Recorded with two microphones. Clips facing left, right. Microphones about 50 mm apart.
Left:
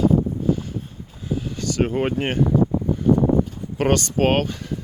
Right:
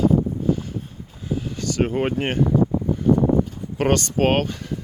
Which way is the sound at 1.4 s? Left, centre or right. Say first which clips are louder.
Even; right.